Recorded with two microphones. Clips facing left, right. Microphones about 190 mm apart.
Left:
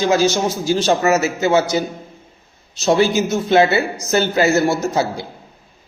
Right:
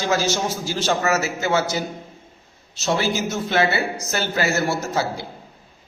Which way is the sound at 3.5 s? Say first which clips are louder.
Left 6 dB; 20° left (ahead or behind).